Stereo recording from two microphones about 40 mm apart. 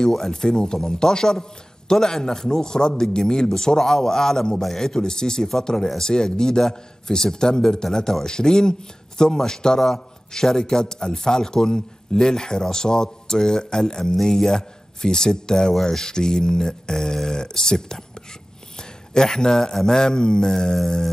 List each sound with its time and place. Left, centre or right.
0.1 s a man's voice: centre